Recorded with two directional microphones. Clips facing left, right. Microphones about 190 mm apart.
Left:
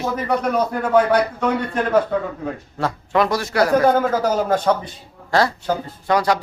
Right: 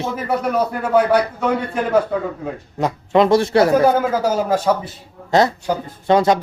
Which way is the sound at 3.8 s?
10° right (ahead or behind).